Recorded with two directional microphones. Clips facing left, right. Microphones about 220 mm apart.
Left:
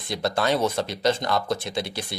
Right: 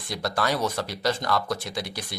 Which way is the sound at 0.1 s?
25° left (ahead or behind).